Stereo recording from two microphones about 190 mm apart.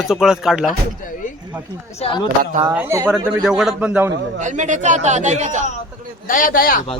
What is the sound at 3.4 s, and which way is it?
Speech, 5° right (ahead or behind).